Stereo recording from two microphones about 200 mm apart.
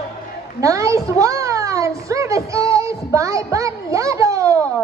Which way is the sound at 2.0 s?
15° right (ahead or behind).